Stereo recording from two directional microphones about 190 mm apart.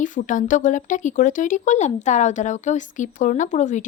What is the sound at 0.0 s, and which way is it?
Speech, 40° left (ahead or behind).